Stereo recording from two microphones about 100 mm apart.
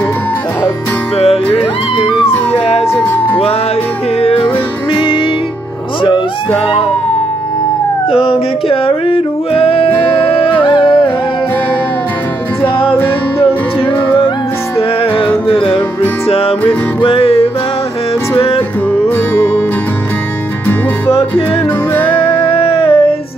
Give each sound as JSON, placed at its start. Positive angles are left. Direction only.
{"t": 1.1, "sound": "music", "side_deg": 90}
{"t": 4.9, "sound": "music", "side_deg": 60}
{"t": 8.1, "sound": "music", "side_deg": 70}
{"t": 16.3, "sound": "music", "side_deg": 80}
{"t": 21.9, "sound": "music", "side_deg": 20}
{"t": 22.6, "sound": "a sound", "side_deg": 70}